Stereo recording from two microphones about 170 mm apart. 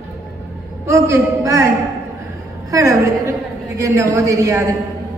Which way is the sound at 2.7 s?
20° right (ahead or behind).